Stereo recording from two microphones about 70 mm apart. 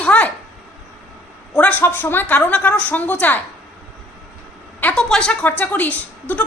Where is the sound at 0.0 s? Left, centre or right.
Centre.